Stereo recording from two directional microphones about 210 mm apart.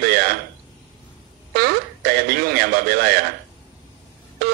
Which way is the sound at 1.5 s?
45° right (ahead or behind).